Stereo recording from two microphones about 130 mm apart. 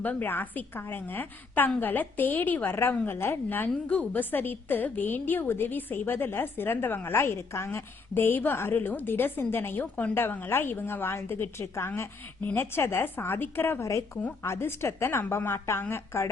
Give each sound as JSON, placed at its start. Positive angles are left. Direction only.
{"t": 0.0, "sound": "a woman's voice", "side_deg": 15}